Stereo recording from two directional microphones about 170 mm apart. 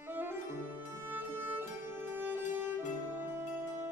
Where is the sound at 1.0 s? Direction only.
10° right (ahead or behind).